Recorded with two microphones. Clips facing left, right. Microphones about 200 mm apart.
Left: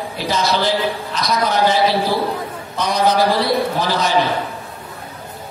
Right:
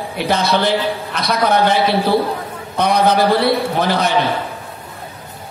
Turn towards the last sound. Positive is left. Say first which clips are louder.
# right 2 dB
turn(degrees=-60)  # may be behind; listen again after turning